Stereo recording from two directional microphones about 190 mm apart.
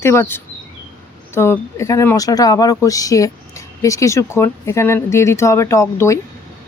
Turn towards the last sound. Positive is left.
turn(degrees=15)  # may be behind; listen again after turning